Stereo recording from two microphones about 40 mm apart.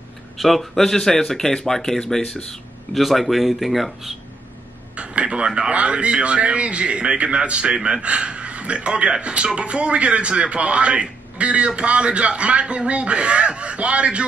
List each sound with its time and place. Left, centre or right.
0.4 s speech: centre
2.9 s speech: centre
4.9 s a man's voice: right